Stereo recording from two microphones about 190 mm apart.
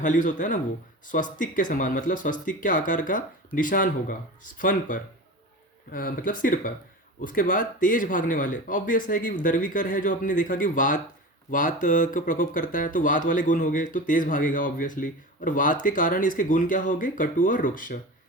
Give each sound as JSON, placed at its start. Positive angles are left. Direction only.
{"t": 0.0, "sound": "speech", "side_deg": 40}